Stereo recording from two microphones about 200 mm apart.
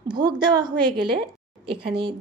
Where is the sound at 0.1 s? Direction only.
20° right (ahead or behind).